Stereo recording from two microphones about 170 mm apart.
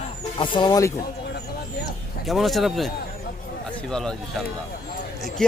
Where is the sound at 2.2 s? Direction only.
Centre (ahead or behind).